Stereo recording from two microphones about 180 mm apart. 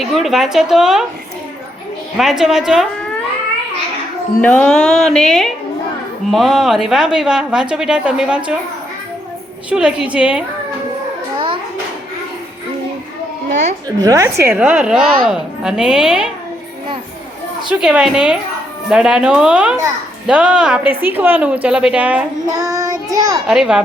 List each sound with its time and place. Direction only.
0.0 s a woman's voice: centre (ahead or behind)
2.1 s a woman's voice: centre (ahead or behind)
4.4 s a woman's voice: 10° left (ahead or behind)
9.6 s a woman's voice: 5° right (ahead or behind)
11.3 s a sound: 30° right (ahead or behind)
14.0 s a woman's voice: 20° right (ahead or behind)
17.7 s a woman's voice: 5° right (ahead or behind)
22.5 s child singing: 20° right (ahead or behind)
23.5 s a woman's voice: 5° right (ahead or behind)